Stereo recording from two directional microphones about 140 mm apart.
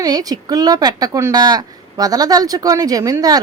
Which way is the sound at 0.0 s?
25° right (ahead or behind).